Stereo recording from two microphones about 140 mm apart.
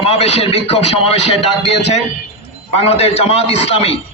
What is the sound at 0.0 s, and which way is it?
A man's voice, 50° left (ahead or behind).